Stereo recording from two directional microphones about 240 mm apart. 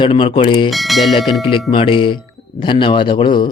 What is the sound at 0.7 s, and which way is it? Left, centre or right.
Speech, centre.